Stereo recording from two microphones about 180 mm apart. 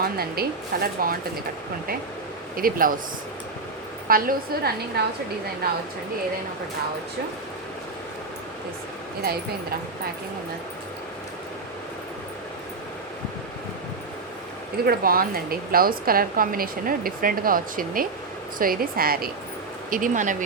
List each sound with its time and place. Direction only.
0.0 s speech: 60° right (ahead or behind)
2.6 s a woman's voice: 50° right (ahead or behind)
4.1 s speech: 55° right (ahead or behind)
14.8 s a woman's voice: 55° right (ahead or behind)